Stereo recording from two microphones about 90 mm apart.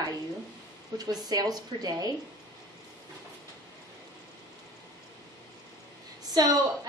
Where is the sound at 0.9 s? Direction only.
45° right (ahead or behind).